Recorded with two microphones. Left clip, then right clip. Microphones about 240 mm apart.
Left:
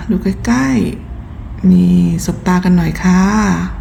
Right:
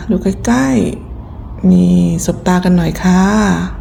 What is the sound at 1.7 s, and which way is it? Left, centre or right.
Speech, left.